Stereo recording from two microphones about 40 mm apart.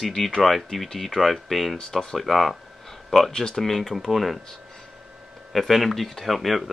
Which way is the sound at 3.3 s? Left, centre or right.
Centre.